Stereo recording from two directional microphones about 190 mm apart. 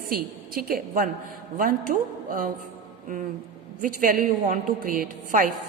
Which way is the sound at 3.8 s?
45° right (ahead or behind).